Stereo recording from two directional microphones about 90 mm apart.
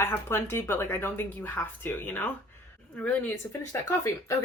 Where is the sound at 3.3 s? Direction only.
30° left (ahead or behind).